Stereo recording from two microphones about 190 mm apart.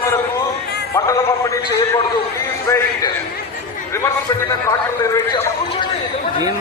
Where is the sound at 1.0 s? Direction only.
20° left (ahead or behind).